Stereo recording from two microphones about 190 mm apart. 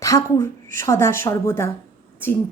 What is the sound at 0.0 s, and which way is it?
A woman's voice, 15° left (ahead or behind).